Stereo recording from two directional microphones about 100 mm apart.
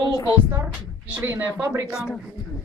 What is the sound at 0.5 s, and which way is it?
Speech, 20° right (ahead or behind).